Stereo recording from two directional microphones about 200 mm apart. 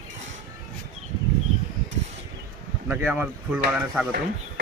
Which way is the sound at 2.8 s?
10° right (ahead or behind).